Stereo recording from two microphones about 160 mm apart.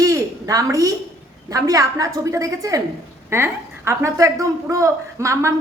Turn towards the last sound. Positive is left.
turn(degrees=-20)  # may be behind; listen again after turning